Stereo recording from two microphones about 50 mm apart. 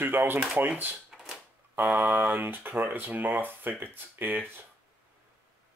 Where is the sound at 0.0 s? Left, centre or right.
Right.